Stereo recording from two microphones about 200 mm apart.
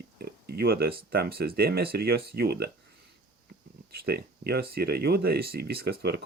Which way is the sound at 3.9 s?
50° right (ahead or behind).